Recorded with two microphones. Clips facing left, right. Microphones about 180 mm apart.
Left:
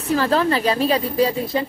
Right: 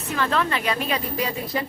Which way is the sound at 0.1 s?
35° left (ahead or behind).